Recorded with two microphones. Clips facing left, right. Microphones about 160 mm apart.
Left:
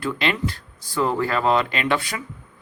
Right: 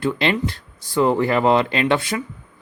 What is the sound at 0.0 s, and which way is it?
Speech, 25° right (ahead or behind).